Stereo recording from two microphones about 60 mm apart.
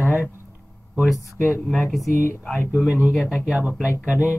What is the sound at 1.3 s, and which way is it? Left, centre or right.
Speech, left.